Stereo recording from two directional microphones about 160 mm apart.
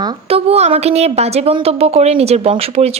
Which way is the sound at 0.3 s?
40° right (ahead or behind).